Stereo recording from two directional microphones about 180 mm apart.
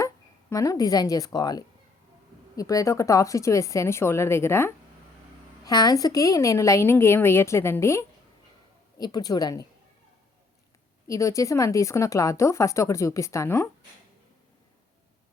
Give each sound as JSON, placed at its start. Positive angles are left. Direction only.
{"t": 0.5, "sound": "a woman's voice", "side_deg": 20}
{"t": 11.1, "sound": "speech", "side_deg": 15}